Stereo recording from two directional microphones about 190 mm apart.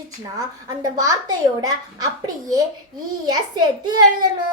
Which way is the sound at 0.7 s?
20° right (ahead or behind).